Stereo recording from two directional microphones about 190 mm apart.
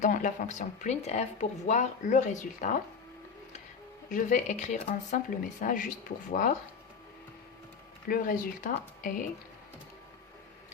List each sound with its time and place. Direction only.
0.0 s speech: 40° left (ahead or behind)
4.1 s speech: 40° left (ahead or behind)
8.0 s speech: 45° left (ahead or behind)